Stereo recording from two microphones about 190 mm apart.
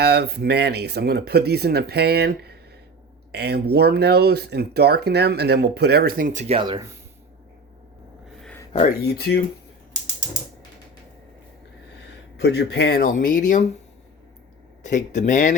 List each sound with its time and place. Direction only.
0.0 s speech: 60° right (ahead or behind); by 6.6 s 40° right (ahead or behind)
6.6 s speech: 25° right (ahead or behind)
8.4 s a sound: 5° left (ahead or behind)
9.1 s speech: 60° left (ahead or behind)
12.4 s speech: 60° left (ahead or behind); by 13.7 s 40° left (ahead or behind)
14.8 s speech: 40° left (ahead or behind)